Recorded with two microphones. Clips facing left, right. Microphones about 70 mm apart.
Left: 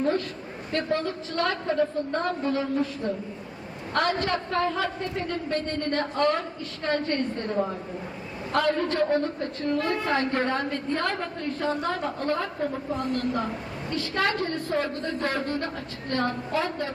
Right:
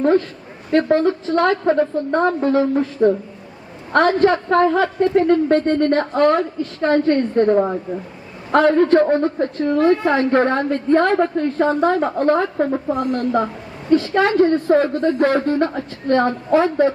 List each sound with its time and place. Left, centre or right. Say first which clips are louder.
0.7 s a woman's voice: right 12 dB; right
10.3 s a woman's voice: right 10 dB; right
14.2 s a woman's voice: right 8 dB; right